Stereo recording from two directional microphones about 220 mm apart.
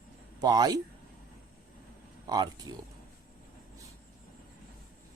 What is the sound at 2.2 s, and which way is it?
Speech, 20° right (ahead or behind).